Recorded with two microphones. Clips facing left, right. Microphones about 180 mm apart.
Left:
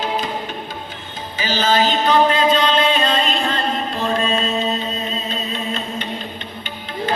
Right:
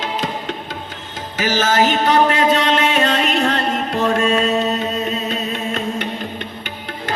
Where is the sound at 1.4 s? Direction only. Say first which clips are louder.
Right 2 dB; 80° right.